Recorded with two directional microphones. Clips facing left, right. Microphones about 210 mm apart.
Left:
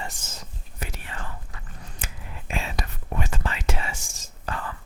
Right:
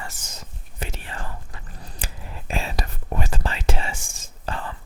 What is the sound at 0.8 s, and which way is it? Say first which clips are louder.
Whispering: right 3 dB; 25° right (ahead or behind).